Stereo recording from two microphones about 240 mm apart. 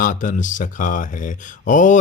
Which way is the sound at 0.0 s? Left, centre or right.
Left.